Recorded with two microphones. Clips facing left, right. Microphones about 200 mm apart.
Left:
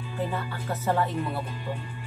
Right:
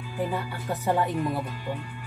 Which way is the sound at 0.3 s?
15° right (ahead or behind).